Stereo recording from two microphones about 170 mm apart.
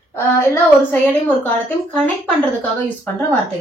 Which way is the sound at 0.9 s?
10° left (ahead or behind).